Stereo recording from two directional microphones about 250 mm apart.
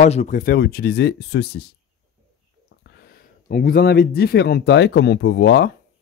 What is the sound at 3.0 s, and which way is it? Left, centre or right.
Speech, left.